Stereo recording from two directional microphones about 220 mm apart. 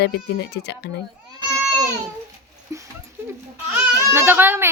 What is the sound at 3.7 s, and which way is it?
Baby cry, 10° right (ahead or behind).